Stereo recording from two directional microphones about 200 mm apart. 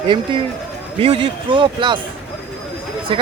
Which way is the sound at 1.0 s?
30° right (ahead or behind).